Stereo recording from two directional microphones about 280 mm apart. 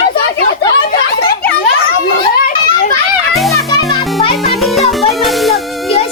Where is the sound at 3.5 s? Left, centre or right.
Centre.